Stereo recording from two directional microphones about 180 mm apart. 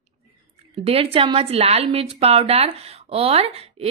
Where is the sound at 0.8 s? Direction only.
30° right (ahead or behind).